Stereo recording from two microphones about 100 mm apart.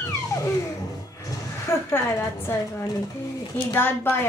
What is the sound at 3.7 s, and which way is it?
Speech, 20° left (ahead or behind).